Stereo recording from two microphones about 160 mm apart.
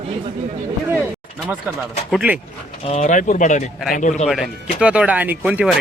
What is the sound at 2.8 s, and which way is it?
Speech, 45° left (ahead or behind).